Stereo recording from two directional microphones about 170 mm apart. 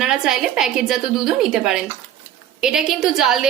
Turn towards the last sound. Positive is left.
turn(degrees=0)  # may be behind; listen again after turning